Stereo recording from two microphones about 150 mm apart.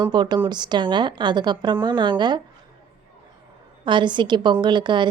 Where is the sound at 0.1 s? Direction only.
30° right (ahead or behind).